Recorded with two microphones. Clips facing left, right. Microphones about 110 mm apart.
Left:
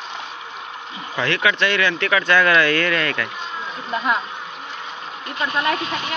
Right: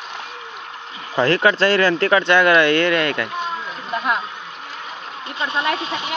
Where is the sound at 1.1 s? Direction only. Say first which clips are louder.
Right 5 dB; 35° right (ahead or behind).